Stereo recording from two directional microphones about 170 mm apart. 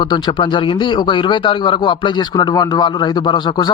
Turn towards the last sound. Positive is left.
turn(degrees=25)  # may be behind; listen again after turning